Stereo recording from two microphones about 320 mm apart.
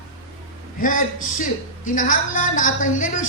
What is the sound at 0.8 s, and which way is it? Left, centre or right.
A woman's voice, left.